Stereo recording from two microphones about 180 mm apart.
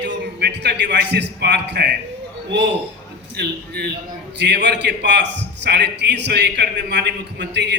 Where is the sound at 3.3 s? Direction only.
65° right (ahead or behind).